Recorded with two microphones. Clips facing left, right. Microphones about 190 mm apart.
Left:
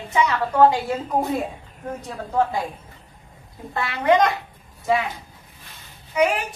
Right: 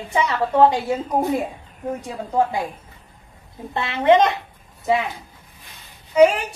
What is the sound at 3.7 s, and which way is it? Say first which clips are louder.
Speech: right 3 dB; 25° right (ahead or behind).